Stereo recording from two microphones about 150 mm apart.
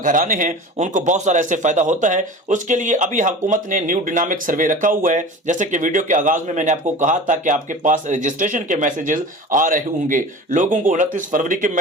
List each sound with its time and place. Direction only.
0.0 s a man's voice: 60° right (ahead or behind)